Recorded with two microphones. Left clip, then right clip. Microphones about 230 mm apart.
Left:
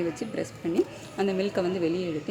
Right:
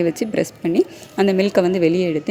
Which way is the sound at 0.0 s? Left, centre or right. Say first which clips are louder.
Right 11 dB; right.